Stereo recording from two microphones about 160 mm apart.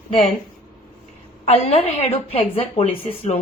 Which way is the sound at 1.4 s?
40° left (ahead or behind).